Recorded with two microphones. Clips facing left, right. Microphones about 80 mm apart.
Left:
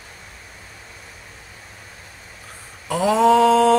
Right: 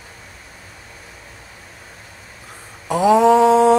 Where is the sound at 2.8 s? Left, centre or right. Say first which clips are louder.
Right 3 dB; centre.